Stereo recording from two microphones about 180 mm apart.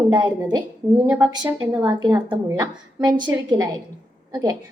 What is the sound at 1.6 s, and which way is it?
A woman's voice, 15° right (ahead or behind).